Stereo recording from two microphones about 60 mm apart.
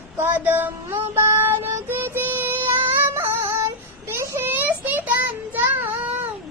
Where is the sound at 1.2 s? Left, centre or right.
Right.